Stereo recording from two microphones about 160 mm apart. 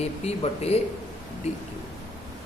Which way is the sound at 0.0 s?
40° left (ahead or behind).